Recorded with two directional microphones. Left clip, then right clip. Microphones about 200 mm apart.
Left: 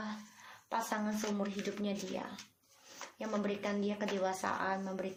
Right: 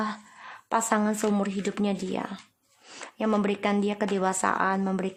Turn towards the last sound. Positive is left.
turn(degrees=-45)  # may be behind; listen again after turning